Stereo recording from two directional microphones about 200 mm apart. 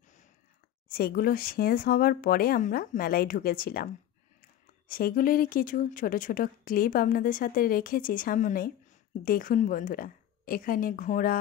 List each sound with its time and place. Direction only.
0.8 s speech: 50° left (ahead or behind)